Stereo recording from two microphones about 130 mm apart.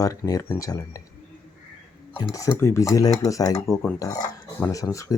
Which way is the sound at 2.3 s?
20° left (ahead or behind).